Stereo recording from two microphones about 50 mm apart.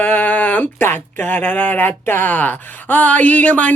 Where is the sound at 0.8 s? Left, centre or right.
Left.